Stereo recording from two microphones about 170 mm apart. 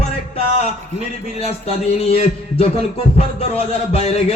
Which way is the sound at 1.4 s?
35° left (ahead or behind).